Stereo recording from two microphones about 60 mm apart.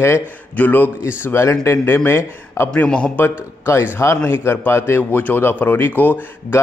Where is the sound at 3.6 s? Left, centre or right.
Left.